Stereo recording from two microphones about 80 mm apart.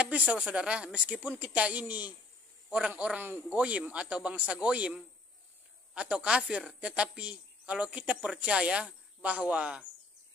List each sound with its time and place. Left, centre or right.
0.0 s a woman's voice: centre